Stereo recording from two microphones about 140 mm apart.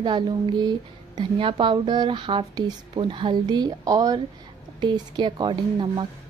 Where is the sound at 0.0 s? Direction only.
35° right (ahead or behind).